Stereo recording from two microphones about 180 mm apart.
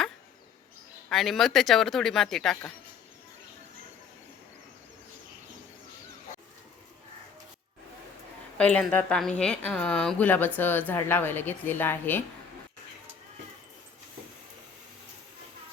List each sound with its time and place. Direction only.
1.1 s speech: centre (ahead or behind)
8.5 s a woman's voice: 5° left (ahead or behind)